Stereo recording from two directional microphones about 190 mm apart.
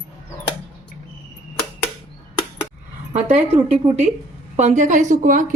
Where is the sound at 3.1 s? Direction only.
35° right (ahead or behind).